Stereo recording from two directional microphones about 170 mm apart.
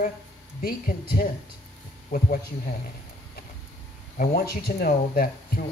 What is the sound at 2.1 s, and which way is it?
Speech, 50° left (ahead or behind).